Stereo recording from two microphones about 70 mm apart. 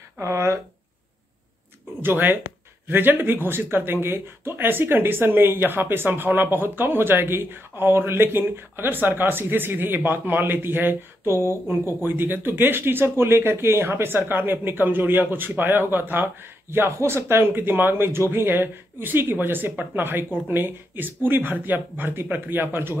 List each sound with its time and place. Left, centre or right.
0.2 s speech: right
2.0 s speech: right